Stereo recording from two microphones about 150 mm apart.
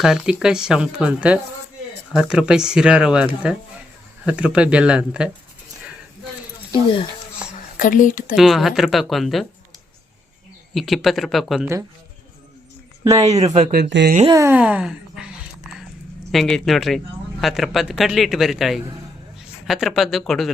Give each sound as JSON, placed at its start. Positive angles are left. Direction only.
{"t": 0.0, "sound": "speech", "side_deg": -5}
{"t": 6.7, "sound": "speech", "side_deg": 35}
{"t": 7.8, "sound": "speech", "side_deg": 60}
{"t": 8.4, "sound": "speech", "side_deg": 0}
{"t": 10.8, "sound": "speech", "side_deg": 0}
{"t": 11.6, "sound": "speech", "side_deg": -20}
{"t": 13.1, "sound": "speech", "side_deg": -25}
{"t": 13.4, "sound": "speech", "side_deg": -50}
{"t": 14.3, "sound": "speech", "side_deg": -20}
{"t": 14.5, "sound": "speech", "side_deg": -10}
{"t": 16.3, "sound": "speech", "side_deg": 0}